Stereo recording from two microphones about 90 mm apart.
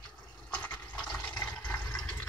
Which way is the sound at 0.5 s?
15° left (ahead or behind).